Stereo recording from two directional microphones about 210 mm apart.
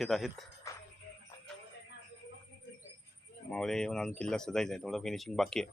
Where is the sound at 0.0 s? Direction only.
Centre (ahead or behind).